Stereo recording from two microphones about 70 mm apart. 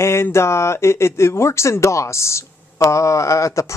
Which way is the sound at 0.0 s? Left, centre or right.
Left.